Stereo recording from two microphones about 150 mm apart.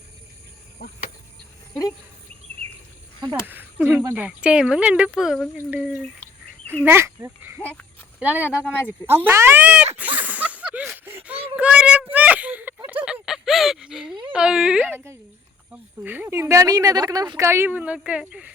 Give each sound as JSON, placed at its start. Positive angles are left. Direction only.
{"t": 3.4, "sound": "speech", "side_deg": -15}
{"t": 7.6, "sound": "speech", "side_deg": 10}
{"t": 8.2, "sound": "speech", "side_deg": -10}
{"t": 8.4, "sound": "speech", "side_deg": 15}
{"t": 9.0, "sound": "speech", "side_deg": -15}
{"t": 10.0, "sound": "a sound", "side_deg": -10}
{"t": 14.3, "sound": "speech", "side_deg": -5}
{"t": 14.9, "sound": "speech", "side_deg": -15}